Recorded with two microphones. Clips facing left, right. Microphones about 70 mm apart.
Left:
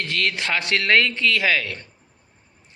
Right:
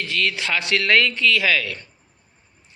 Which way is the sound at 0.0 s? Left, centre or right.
Left.